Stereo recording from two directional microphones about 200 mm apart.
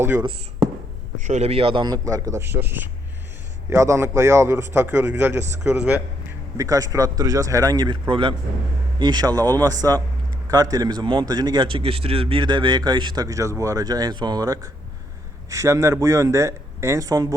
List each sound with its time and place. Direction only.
0.2 s speech: 20° right (ahead or behind)
1.2 s a man's voice: 35° right (ahead or behind); by 17.3 s 15° right (ahead or behind)